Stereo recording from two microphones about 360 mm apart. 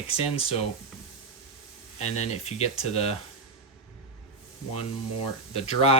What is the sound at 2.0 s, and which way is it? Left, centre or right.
Speech, centre.